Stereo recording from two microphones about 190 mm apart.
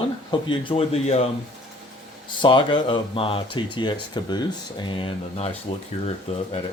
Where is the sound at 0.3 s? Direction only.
25° left (ahead or behind).